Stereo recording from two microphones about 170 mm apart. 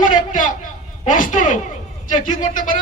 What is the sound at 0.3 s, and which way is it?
A man's voice, 50° left (ahead or behind).